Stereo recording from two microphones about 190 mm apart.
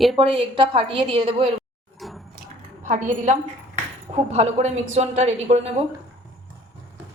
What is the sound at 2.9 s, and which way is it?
A woman's voice, 40° right (ahead or behind).